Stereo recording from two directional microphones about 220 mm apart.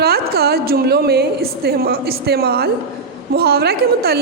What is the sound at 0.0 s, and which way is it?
A woman's voice, 45° right (ahead or behind).